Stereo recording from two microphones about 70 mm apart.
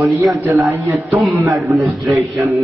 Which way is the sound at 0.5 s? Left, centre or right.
Right.